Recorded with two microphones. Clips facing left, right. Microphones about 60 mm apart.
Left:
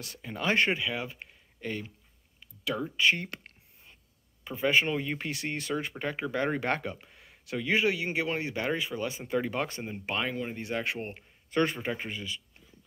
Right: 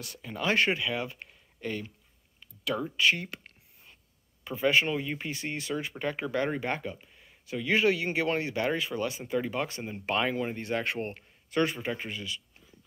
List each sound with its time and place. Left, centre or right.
0.2 s speech: centre
4.5 s a man's voice: centre